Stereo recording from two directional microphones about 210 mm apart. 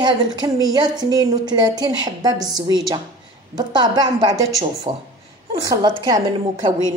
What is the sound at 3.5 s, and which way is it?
A woman's voice, 20° right (ahead or behind).